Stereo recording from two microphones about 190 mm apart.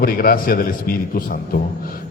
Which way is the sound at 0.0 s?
50° left (ahead or behind).